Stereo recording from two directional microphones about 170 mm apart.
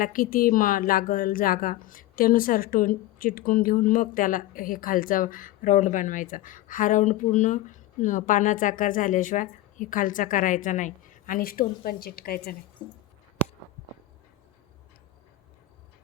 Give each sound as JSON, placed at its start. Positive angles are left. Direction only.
{"t": 0.0, "sound": "a woman's voice", "side_deg": 55}